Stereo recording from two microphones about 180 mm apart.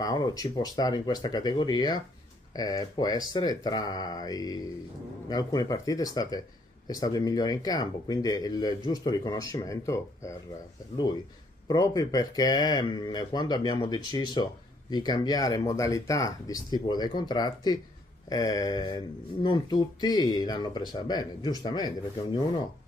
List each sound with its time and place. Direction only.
0.0 s speech: 20° left (ahead or behind)
11.6 s speech: 20° left (ahead or behind)